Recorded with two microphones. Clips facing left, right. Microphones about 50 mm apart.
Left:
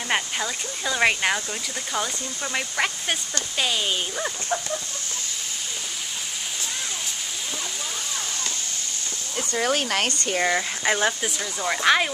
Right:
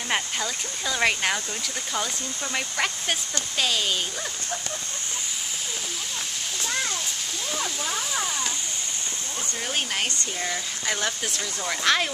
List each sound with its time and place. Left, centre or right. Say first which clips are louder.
0.1 s speech: left 2 dB; centre
9.8 s speech: left 3 dB; left
10.9 s speech: left 5 dB; left